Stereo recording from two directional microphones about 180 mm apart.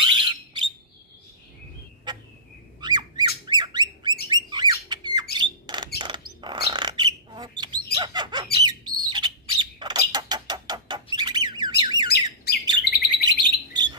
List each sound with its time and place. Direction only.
0.0 s alarm: 25° right (ahead or behind)
2.8 s squawk: 25° right (ahead or behind)
4.3 s bird: 25° right (ahead or behind)
5.4 s rodents: 25° right (ahead or behind)
5.9 s bird: 25° right (ahead or behind)
11.8 s squawk: 25° right (ahead or behind)
12.1 s bird: 60° left (ahead or behind)